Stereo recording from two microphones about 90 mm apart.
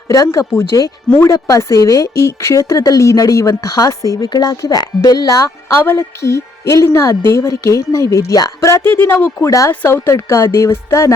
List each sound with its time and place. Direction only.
0.1 s speech: 35° left (ahead or behind)
5.6 s speech: 25° left (ahead or behind)